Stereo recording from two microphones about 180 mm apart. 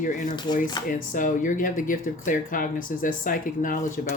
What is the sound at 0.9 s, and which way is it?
Speech, 50° left (ahead or behind).